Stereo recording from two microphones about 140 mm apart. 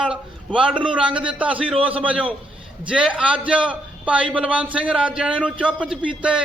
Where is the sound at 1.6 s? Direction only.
40° right (ahead or behind).